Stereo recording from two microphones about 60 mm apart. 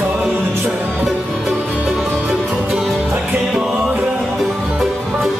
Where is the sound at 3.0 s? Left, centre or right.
Right.